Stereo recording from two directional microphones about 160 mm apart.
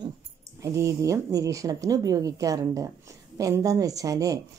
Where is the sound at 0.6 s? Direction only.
20° right (ahead or behind).